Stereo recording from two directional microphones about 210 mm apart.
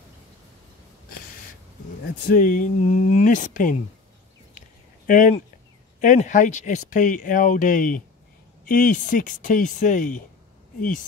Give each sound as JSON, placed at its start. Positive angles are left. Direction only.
{"t": 2.2, "sound": "speech", "side_deg": 40}
{"t": 4.6, "sound": "a sound", "side_deg": 40}
{"t": 5.9, "sound": "speech", "side_deg": 35}